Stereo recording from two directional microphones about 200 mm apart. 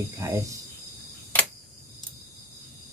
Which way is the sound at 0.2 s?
15° right (ahead or behind).